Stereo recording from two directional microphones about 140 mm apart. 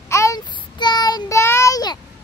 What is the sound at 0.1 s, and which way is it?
Child singing, 20° left (ahead or behind).